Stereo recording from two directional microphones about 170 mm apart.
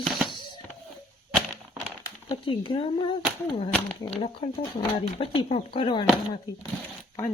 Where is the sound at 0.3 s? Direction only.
25° left (ahead or behind).